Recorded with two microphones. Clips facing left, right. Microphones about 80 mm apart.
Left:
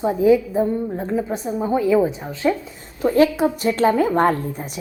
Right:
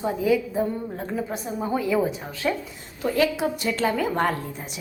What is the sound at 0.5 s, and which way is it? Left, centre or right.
A woman's voice, centre.